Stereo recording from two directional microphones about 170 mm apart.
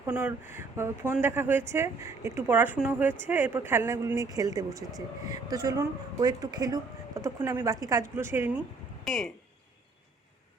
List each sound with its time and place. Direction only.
0.0 s a woman's voice: 10° right (ahead or behind)
9.0 s speech: centre (ahead or behind)